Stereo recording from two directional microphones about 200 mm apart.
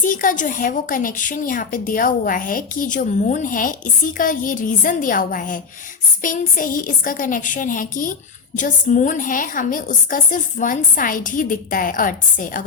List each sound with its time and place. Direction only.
0.0 s a woman's voice: 40° left (ahead or behind)